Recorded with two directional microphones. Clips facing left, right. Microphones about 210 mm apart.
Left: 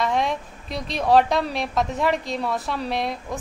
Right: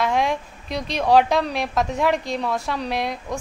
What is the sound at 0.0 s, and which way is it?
Speech, centre (ahead or behind).